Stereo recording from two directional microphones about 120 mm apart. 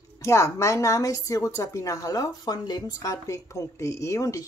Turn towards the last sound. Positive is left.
turn(degrees=25)  # may be behind; listen again after turning